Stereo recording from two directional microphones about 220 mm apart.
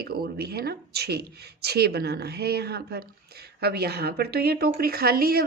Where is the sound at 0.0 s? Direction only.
45° right (ahead or behind).